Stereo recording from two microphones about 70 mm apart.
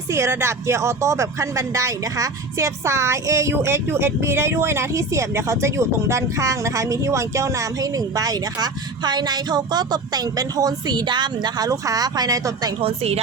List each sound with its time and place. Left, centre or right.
0.1 s speech: right